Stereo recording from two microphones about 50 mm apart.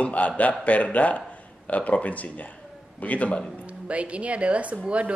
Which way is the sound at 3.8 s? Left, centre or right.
Right.